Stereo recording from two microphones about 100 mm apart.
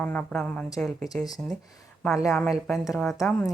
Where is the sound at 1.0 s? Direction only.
40° left (ahead or behind).